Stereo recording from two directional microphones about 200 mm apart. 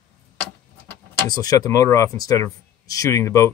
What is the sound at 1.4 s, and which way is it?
Speech, 20° left (ahead or behind).